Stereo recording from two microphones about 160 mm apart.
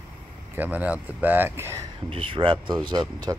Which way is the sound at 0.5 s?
10° right (ahead or behind).